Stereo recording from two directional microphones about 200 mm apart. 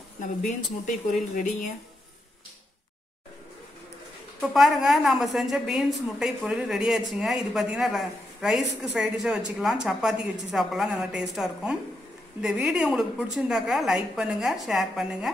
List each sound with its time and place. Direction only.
0.2 s speech: 40° left (ahead or behind)
4.4 s a woman's voice: centre (ahead or behind)